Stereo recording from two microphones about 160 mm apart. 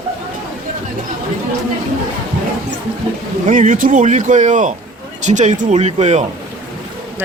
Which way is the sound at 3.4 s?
50° right (ahead or behind).